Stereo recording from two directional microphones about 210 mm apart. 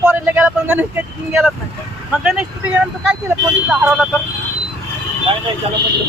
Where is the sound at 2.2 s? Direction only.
5° right (ahead or behind).